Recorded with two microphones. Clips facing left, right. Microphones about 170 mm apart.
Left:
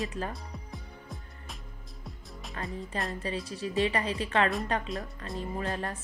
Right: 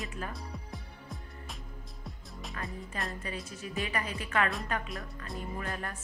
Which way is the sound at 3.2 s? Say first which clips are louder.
Left 6 dB; 30° left (ahead or behind).